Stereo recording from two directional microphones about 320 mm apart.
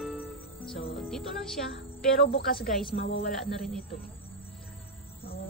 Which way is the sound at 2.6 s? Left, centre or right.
Centre.